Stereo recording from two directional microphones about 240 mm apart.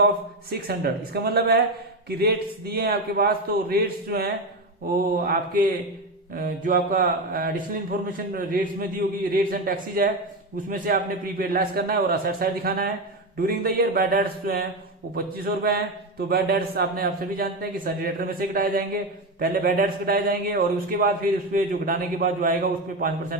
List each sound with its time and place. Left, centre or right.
0.7 s speech: right